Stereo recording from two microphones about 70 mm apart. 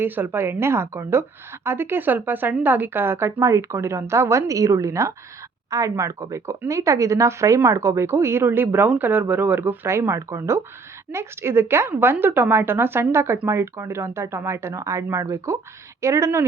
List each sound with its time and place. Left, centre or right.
0.0 s a woman's voice: right